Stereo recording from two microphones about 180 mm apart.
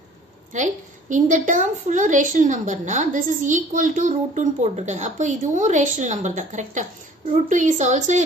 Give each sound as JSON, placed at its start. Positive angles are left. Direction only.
{"t": 0.5, "sound": "a woman's voice", "side_deg": -40}